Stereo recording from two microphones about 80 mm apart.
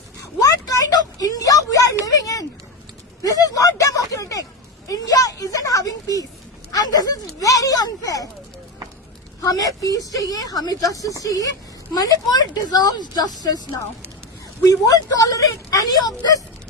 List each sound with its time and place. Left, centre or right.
0.3 s a sound: left
2.0 s speech: left
3.2 s a sound: left
4.9 s speech: left
9.4 s speech: left
14.6 s speech: left